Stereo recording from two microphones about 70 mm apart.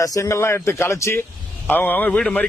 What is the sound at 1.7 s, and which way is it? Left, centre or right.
Speech, left.